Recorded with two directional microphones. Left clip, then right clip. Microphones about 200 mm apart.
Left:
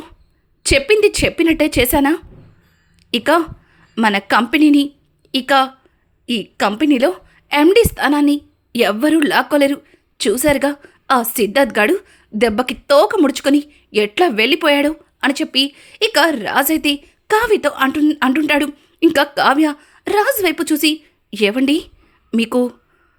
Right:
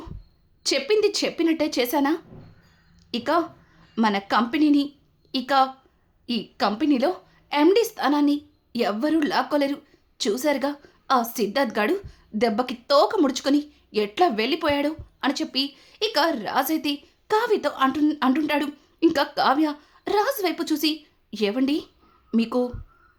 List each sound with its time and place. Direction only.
0.6 s a woman's voice: 15° left (ahead or behind)